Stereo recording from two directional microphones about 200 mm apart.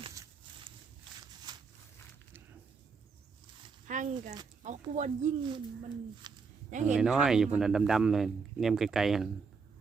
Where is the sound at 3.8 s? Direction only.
40° right (ahead or behind).